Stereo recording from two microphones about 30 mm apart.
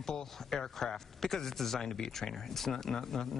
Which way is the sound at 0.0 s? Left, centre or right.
Centre.